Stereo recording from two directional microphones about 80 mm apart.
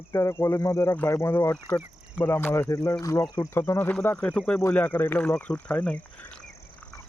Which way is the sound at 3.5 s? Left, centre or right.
Left.